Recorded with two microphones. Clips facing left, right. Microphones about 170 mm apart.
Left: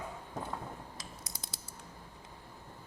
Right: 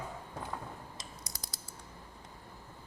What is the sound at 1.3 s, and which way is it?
Typing, 25° left (ahead or behind).